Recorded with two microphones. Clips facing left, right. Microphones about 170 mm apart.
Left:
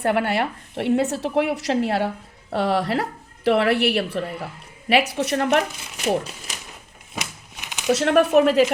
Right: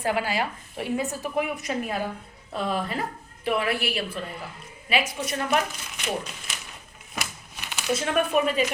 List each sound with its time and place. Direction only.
0.0 s a woman's voice: 65° left (ahead or behind)
6.0 s speech: 35° left (ahead or behind)
7.2 s a sound: 15° left (ahead or behind)
7.9 s a woman's voice: 75° left (ahead or behind)